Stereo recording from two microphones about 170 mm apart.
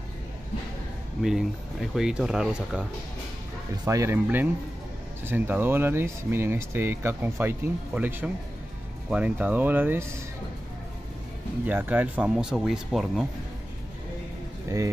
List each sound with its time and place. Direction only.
1.2 s speech: centre (ahead or behind)
3.8 s speech: 15° right (ahead or behind)
11.6 s speech: 10° right (ahead or behind)